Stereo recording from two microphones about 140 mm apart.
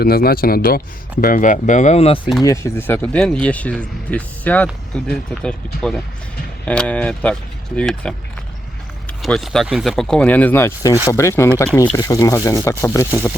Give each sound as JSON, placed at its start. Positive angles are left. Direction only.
{"t": 0.0, "sound": "speech", "side_deg": 90}
{"t": 1.2, "sound": "speech", "side_deg": 75}
{"t": 2.4, "sound": "speech", "side_deg": 20}
{"t": 3.2, "sound": "speech", "side_deg": 5}
{"t": 9.2, "sound": "speech", "side_deg": 0}